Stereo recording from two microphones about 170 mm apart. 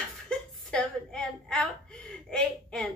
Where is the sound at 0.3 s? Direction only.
5° left (ahead or behind).